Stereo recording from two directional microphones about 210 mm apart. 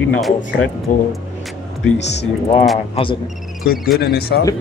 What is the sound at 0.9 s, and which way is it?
Speech, 40° left (ahead or behind).